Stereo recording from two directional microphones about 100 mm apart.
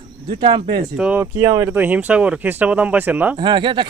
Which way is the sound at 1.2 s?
25° right (ahead or behind).